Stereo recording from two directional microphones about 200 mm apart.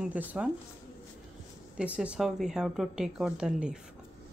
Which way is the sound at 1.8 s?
5° right (ahead or behind).